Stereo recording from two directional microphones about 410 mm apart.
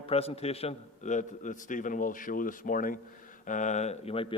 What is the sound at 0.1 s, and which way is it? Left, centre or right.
A man's voice, centre.